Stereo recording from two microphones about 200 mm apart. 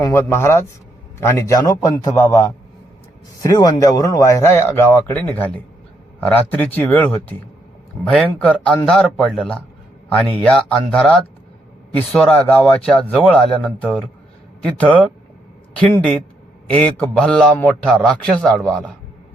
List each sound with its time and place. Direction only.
0.0 s a man's voice: 10° left (ahead or behind)